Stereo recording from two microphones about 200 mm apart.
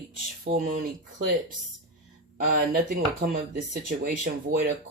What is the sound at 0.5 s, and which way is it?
Speech, 35° right (ahead or behind).